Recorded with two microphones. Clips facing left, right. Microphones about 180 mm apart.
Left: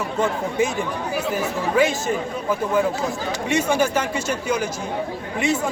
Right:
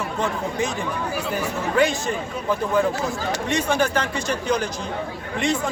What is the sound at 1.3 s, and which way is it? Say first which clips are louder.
Speech: left 2 dB; 5° left (ahead or behind).